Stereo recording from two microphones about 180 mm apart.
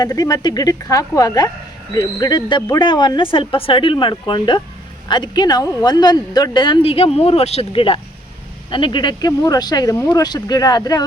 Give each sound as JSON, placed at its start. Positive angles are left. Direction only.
{"t": 0.0, "sound": "speech", "side_deg": 20}